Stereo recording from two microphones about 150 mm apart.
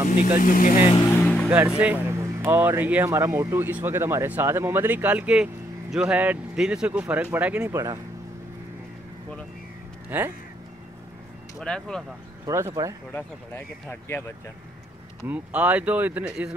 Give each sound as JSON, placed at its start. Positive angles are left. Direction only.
{"t": 0.4, "sound": "speech", "side_deg": 65}
{"t": 1.2, "sound": "music", "side_deg": 5}
{"t": 1.5, "sound": "speech", "side_deg": -10}
{"t": 7.7, "sound": "speech", "side_deg": -20}
{"t": 10.0, "sound": "speech", "side_deg": -15}
{"t": 11.6, "sound": "speech", "side_deg": 5}
{"t": 12.4, "sound": "speech", "side_deg": -20}
{"t": 13.1, "sound": "speech", "side_deg": 15}
{"t": 15.2, "sound": "speech", "side_deg": -10}